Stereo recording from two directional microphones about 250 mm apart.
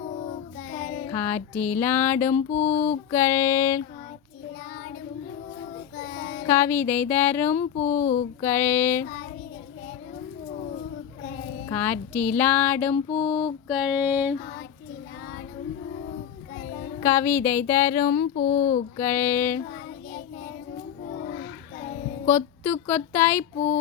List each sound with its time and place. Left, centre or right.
1.1 s speech: centre
2.3 s speech: left
3.1 s speech: centre
6.1 s child singing: left
6.4 s speech: centre
7.6 s speech: left
8.4 s speech: centre
11.7 s speech: centre
13.2 s mantra: centre
17.0 s speech: centre
18.1 s speech: left
18.9 s speech: centre
22.3 s speech: centre